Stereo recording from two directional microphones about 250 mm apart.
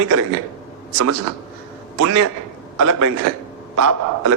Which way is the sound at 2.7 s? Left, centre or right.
Right.